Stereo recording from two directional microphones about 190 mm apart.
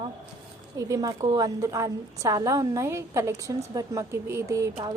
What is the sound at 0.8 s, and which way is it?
A woman's voice, 20° right (ahead or behind).